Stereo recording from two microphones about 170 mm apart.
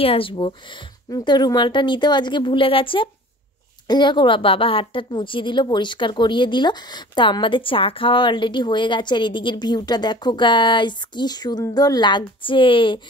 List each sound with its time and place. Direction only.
0.0 s a woman's voice: 35° left (ahead or behind)